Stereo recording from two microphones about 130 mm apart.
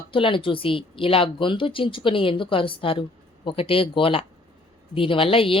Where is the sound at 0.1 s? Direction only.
40° left (ahead or behind).